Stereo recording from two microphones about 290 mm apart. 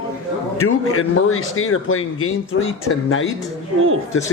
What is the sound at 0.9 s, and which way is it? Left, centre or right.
Speech, left.